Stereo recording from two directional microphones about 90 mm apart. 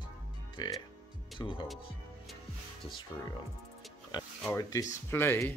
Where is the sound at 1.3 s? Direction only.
65° left (ahead or behind).